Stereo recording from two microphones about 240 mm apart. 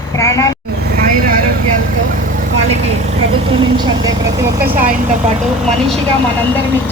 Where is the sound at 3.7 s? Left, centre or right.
Centre.